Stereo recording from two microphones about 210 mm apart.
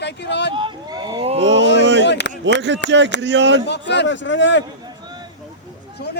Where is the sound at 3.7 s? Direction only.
55° left (ahead or behind).